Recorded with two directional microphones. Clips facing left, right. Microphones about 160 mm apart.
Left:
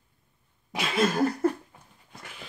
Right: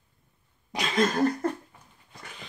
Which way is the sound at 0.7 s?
5° left (ahead or behind).